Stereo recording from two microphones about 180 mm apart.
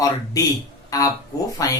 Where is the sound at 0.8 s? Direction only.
20° left (ahead or behind).